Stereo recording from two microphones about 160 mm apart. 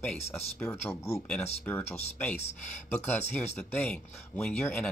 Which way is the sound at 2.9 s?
10° left (ahead or behind).